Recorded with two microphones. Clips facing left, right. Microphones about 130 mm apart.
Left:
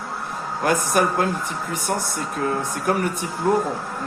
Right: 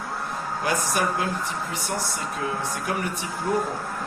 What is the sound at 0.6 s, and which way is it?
Speech, 50° left (ahead or behind).